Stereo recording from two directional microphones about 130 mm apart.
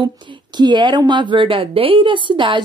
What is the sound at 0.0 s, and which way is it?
A woman's voice, 35° right (ahead or behind).